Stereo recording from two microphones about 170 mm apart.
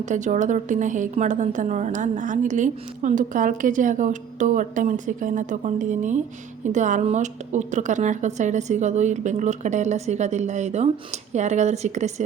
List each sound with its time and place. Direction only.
0.0 s a woman's voice: 45° right (ahead or behind)